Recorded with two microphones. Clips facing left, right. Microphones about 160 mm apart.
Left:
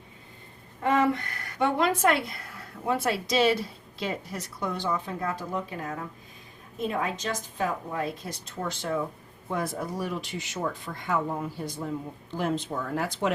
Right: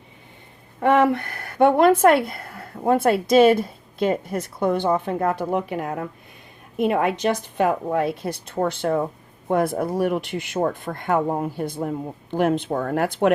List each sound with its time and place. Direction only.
0.8 s speech: 60° right (ahead or behind)